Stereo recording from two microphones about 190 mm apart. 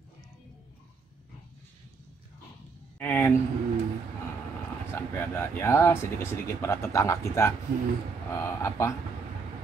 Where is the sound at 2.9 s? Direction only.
10° left (ahead or behind).